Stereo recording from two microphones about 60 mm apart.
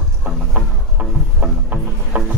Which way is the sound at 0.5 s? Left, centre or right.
Right.